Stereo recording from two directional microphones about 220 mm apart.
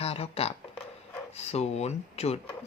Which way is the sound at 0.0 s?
25° left (ahead or behind).